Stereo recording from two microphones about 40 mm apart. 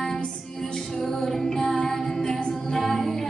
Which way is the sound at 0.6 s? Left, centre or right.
Left.